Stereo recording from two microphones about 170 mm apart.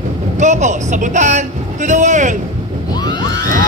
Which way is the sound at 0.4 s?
45° right (ahead or behind).